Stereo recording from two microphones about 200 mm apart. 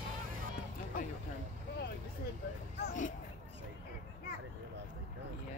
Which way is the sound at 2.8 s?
40° left (ahead or behind).